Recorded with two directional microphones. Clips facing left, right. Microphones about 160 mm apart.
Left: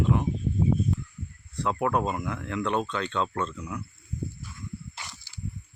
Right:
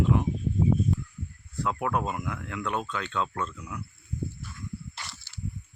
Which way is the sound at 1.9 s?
30° left (ahead or behind).